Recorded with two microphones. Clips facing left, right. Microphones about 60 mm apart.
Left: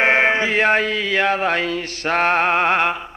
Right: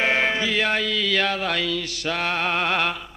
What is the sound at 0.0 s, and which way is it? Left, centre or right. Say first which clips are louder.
Mantra: left 5 dB; left.